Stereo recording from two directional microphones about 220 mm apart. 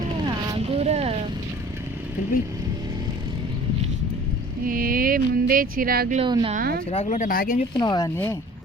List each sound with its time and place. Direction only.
0.5 s vehicle: 25° right (ahead or behind)
4.6 s speech: 40° right (ahead or behind)
6.1 s speech: 25° right (ahead or behind)
6.5 s a woman's voice: 40° right (ahead or behind)
6.9 s speech: 30° left (ahead or behind)
7.7 s speech: 20° left (ahead or behind)